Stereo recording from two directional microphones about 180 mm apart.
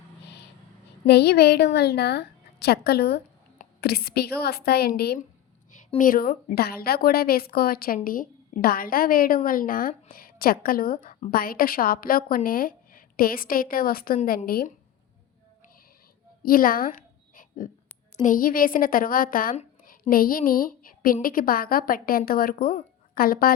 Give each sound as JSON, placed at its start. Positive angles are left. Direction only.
{"t": 1.0, "sound": "a woman's voice", "side_deg": 65}
{"t": 5.7, "sound": "a woman's voice", "side_deg": 45}
{"t": 16.4, "sound": "a sound", "side_deg": 55}
{"t": 18.2, "sound": "a woman's voice", "side_deg": 50}